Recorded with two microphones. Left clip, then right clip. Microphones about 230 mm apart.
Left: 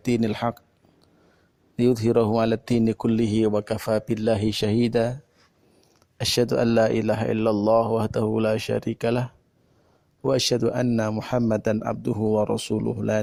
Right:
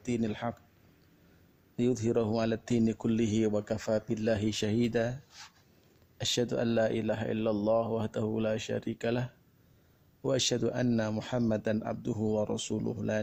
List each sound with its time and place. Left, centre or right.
0.0 s speech: left
1.7 s speech: left
6.1 s speech: left